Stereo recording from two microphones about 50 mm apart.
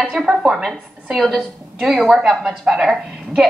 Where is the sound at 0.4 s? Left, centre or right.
Centre.